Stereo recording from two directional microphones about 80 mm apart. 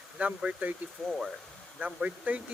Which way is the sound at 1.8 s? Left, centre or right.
Centre.